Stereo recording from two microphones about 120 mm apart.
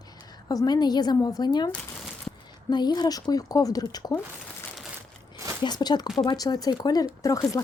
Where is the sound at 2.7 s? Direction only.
35° left (ahead or behind).